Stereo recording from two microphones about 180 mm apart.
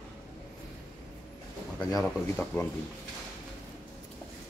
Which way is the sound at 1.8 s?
20° left (ahead or behind).